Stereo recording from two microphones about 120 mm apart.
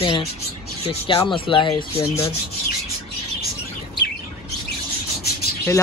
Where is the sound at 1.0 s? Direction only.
45° left (ahead or behind).